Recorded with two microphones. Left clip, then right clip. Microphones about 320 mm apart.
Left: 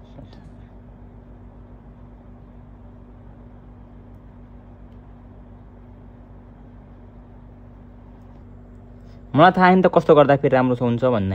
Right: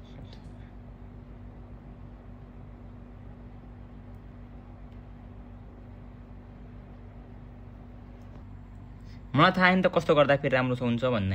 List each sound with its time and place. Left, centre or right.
9.3 s speech: left